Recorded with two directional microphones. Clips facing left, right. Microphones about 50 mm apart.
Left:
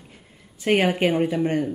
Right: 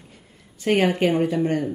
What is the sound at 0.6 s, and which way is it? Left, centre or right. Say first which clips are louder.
Speech: even; left.